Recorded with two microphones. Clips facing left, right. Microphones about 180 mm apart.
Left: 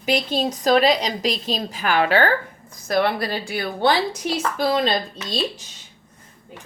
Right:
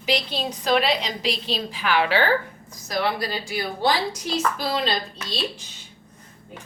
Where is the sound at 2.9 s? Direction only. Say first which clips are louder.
Left 4 dB; 55° left (ahead or behind).